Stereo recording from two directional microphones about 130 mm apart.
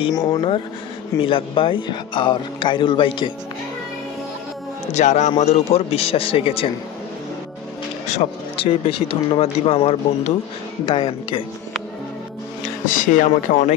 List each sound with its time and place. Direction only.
0.1 s speech: 30° left (ahead or behind)
1.2 s speech: 40° left (ahead or behind)
4.9 s a man's voice: 65° left (ahead or behind); by 6.7 s 45° left (ahead or behind)
8.1 s speech: 55° left (ahead or behind)
12.8 s speech: 90° left; by 13.7 s 70° left (ahead or behind)